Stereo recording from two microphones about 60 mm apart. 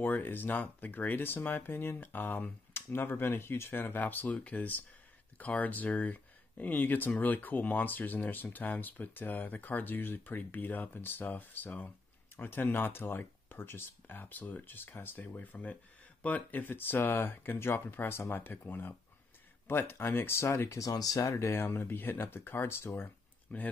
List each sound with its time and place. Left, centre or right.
0.0 s speech: left
20.8 s speech: left
21.2 s speech: left
23.5 s speech: left